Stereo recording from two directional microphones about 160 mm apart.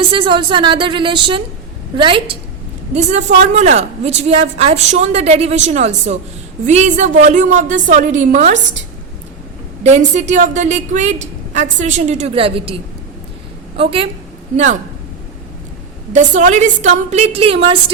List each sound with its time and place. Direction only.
0.1 s a woman's voice: 30° right (ahead or behind)
2.9 s a woman's voice: 45° right (ahead or behind)
9.8 s a woman's voice: 45° right (ahead or behind)
13.7 s a woman's voice: 35° right (ahead or behind)
14.5 s a woman's voice: 50° right (ahead or behind)
16.1 s a woman's voice: 50° right (ahead or behind); by 17.9 s 35° right (ahead or behind)